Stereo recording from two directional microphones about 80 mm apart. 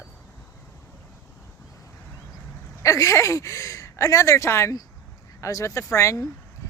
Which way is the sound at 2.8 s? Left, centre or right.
Left.